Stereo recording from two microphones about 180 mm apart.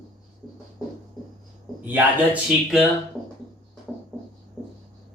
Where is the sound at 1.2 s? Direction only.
Centre (ahead or behind).